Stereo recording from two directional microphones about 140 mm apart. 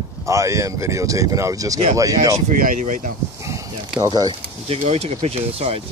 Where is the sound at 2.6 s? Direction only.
75° right (ahead or behind).